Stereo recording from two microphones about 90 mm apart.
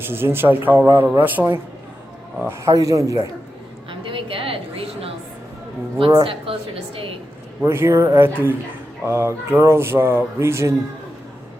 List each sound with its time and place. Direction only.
0.1 s speech: 25° right (ahead or behind)
2.5 s speech: 35° right (ahead or behind)
3.8 s a sound: 75° right (ahead or behind); by 5.1 s 90° right
6.2 s a woman's voice: 90° right
7.6 s speech: 30° right (ahead or behind)